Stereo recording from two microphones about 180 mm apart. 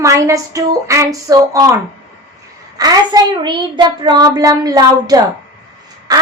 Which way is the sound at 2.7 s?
25° right (ahead or behind).